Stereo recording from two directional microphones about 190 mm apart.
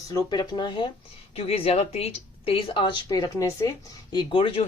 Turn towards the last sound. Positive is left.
turn(degrees=25)  # may be behind; listen again after turning